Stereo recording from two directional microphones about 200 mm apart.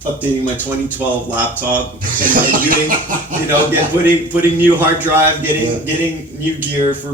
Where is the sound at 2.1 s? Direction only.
40° right (ahead or behind).